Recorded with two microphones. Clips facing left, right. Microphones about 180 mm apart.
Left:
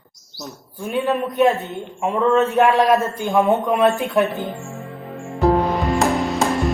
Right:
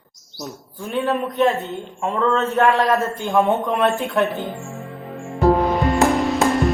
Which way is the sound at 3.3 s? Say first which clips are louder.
Left 1 dB; centre (ahead or behind).